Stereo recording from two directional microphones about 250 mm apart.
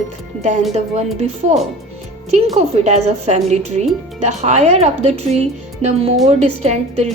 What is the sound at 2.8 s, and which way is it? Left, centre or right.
Speech, right.